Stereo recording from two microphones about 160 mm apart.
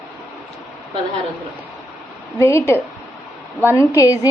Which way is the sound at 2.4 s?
20° left (ahead or behind).